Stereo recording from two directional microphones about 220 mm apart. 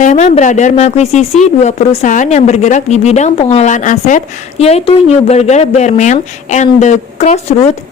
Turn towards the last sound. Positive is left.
turn(degrees=30)  # may be behind; listen again after turning